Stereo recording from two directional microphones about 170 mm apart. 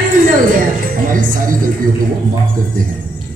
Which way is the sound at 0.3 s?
55° right (ahead or behind).